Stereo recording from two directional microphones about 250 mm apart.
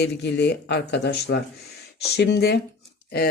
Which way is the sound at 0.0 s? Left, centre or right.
Left.